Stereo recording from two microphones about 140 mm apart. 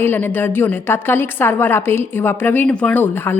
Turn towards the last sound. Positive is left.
turn(degrees=15)  # may be behind; listen again after turning